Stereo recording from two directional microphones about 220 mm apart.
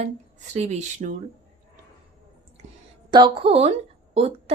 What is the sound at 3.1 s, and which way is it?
A woman's voice, 20° right (ahead or behind).